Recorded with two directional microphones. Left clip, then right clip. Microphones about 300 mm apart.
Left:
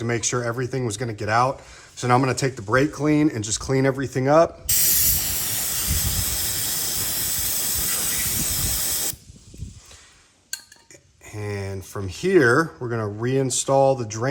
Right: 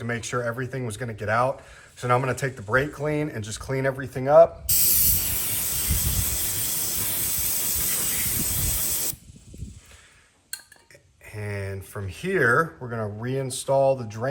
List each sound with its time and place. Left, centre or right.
0.1 s speech: left
4.7 s hiss: centre
7.5 s hiss: centre
8.8 s spray: centre
11.3 s speech: centre